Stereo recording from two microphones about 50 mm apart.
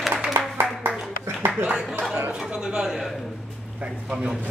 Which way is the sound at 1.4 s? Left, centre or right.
Right.